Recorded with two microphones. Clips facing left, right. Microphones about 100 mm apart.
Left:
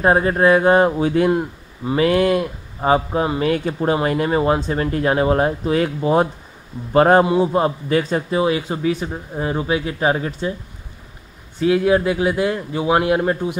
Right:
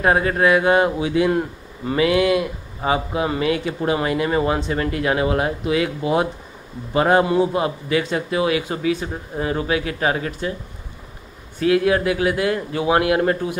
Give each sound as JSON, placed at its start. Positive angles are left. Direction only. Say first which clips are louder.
{"t": 0.0, "sound": "a man's voice", "louder": "left 2 dB", "side_deg": 30}
{"t": 11.6, "sound": "speech", "louder": "left 1 dB", "side_deg": 25}